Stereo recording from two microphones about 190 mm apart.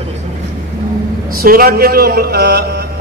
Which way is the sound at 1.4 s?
50° right (ahead or behind).